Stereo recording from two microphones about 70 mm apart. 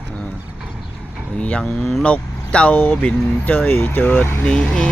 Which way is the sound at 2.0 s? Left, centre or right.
Centre.